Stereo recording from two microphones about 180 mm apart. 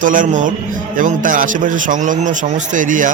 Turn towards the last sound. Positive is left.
turn(degrees=-45)  # may be behind; listen again after turning